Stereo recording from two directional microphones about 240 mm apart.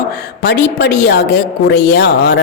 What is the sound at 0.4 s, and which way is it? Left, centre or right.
A man's voice, left.